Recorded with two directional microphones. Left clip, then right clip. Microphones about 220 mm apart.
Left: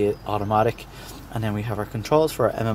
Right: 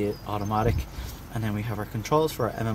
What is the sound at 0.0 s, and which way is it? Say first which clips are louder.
Speech: left 6 dB; 20° left (ahead or behind).